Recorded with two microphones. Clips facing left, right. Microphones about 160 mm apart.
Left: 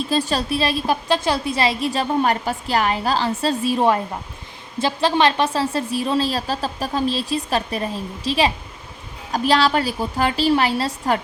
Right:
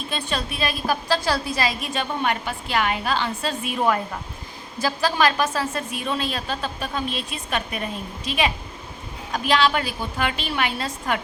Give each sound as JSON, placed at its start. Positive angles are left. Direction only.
{"t": 0.1, "sound": "a woman's voice", "side_deg": 35}